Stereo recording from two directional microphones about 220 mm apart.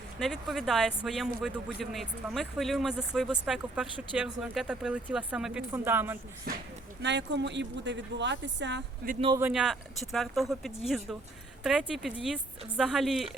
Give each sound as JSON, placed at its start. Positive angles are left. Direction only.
{"t": 0.2, "sound": "speech", "side_deg": 0}
{"t": 7.0, "sound": "speech", "side_deg": -50}
{"t": 9.2, "sound": "speech", "side_deg": -15}
{"t": 9.5, "sound": "speech", "side_deg": -5}